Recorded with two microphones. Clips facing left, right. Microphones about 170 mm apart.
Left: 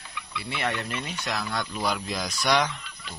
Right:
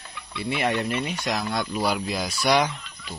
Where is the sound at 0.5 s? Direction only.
15° right (ahead or behind).